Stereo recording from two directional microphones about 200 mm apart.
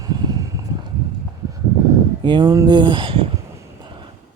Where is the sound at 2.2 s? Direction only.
25° right (ahead or behind).